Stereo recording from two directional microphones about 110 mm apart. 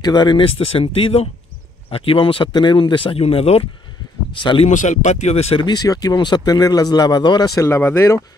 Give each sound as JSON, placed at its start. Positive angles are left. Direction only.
{"t": 0.0, "sound": "speech", "side_deg": 40}
{"t": 0.6, "sound": "speech", "side_deg": 60}
{"t": 4.4, "sound": "speech", "side_deg": 50}
{"t": 4.6, "sound": "speech", "side_deg": 90}
{"t": 5.6, "sound": "speech", "side_deg": 40}